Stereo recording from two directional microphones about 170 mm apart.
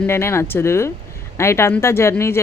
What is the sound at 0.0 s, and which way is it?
Speech, 15° left (ahead or behind).